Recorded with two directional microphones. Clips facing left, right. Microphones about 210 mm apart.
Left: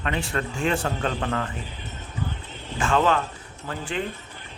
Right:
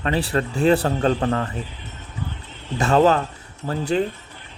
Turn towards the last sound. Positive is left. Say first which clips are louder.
# right 8 dB
turn(degrees=-40)  # may be behind; listen again after turning